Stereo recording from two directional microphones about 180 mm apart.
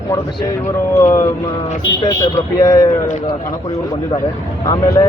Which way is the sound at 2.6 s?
20° left (ahead or behind).